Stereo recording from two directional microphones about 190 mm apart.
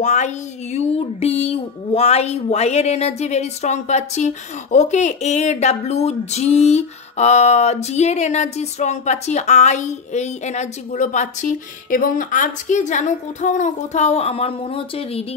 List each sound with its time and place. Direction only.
0.0 s speech: 40° left (ahead or behind)